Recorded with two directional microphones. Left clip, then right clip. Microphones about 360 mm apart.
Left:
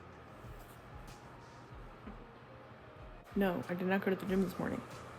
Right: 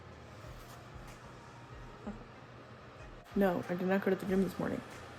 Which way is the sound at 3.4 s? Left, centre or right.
Centre.